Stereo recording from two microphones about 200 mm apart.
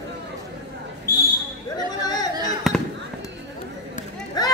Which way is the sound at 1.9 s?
20° left (ahead or behind).